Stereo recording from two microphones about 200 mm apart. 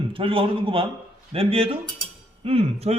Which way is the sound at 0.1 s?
25° right (ahead or behind).